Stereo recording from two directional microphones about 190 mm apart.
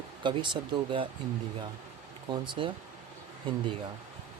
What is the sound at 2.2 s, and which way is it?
Speech, 25° right (ahead or behind).